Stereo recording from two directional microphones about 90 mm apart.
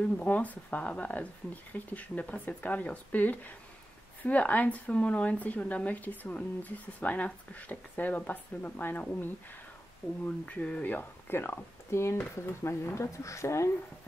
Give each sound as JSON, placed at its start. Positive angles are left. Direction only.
{"t": 0.2, "sound": "speech", "side_deg": 15}